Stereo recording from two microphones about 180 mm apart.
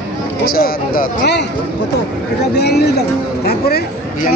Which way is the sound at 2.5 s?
65° left (ahead or behind).